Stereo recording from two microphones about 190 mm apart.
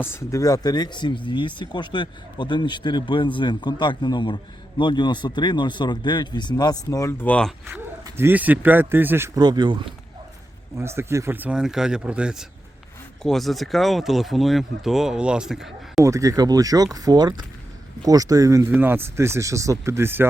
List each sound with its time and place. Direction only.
0.0 s speech: 15° left (ahead or behind)
8.0 s speech: 15° right (ahead or behind)
16.0 s speech: 15° right (ahead or behind)